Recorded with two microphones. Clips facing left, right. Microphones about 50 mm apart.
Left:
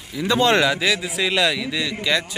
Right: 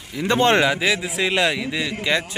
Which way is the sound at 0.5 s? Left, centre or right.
Right.